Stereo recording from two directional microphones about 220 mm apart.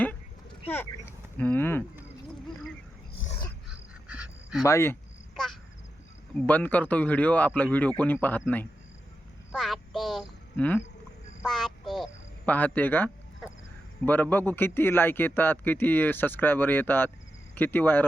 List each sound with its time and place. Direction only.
1.4 s a man's voice: 10° left (ahead or behind)
4.1 s dog: 5° right (ahead or behind)
4.6 s a man's voice: 10° left (ahead or behind)
6.3 s a man's voice: 10° left (ahead or behind)
9.5 s a sound: centre (ahead or behind)
11.4 s quack: centre (ahead or behind)
14.0 s a man's voice: 10° left (ahead or behind)